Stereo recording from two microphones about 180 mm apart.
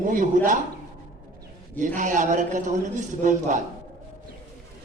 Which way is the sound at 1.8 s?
45° right (ahead or behind).